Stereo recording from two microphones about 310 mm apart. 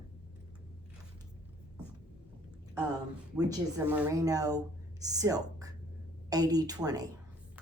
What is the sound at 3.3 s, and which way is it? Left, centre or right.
Speech, centre.